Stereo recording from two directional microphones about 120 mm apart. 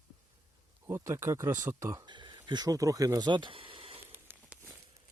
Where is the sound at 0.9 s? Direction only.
20° right (ahead or behind); by 4.0 s 50° right (ahead or behind).